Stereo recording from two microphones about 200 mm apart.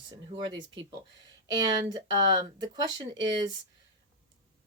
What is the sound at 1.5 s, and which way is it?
Speech, 20° right (ahead or behind).